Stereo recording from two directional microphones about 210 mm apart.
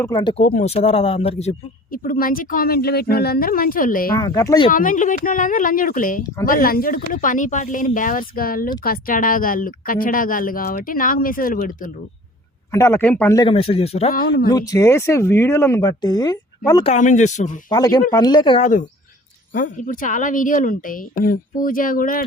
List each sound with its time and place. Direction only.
0.0 s speech: 20° left (ahead or behind)
0.4 s speech: 35° left (ahead or behind)
4.1 s speech: 15° left (ahead or behind)
4.7 s speech: 40° left (ahead or behind)
12.7 s speech: 10° left (ahead or behind)
13.5 s speech: 25° left (ahead or behind)
14.1 s speech: 45° left (ahead or behind)
14.5 s speech: 15° left (ahead or behind)
16.9 s speech: 35° left (ahead or behind)
17.7 s speech: 20° left (ahead or behind)
18.6 s speech: 35° left (ahead or behind)